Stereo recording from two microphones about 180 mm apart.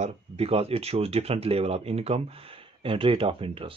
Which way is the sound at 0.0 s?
35° right (ahead or behind).